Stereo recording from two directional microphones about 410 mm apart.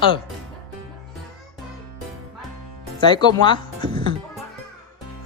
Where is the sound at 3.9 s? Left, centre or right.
Centre.